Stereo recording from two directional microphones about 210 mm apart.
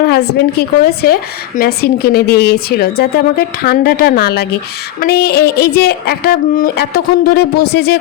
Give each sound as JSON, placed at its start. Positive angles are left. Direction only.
{"t": 0.0, "sound": "speech", "side_deg": 50}